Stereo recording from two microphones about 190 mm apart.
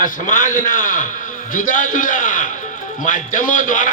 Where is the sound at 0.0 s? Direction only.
45° left (ahead or behind).